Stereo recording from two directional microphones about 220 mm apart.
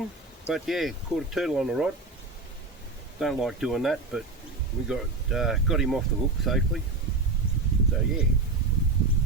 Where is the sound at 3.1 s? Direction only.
Centre (ahead or behind).